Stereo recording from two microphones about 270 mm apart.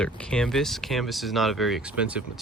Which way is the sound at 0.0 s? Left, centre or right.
Centre.